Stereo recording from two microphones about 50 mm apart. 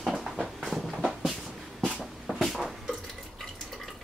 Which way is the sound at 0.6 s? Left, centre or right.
Centre.